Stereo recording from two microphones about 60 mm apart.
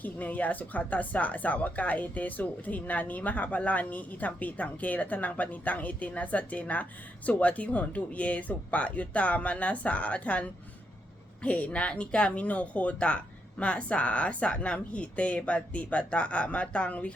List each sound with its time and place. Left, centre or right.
0.0 s speech: left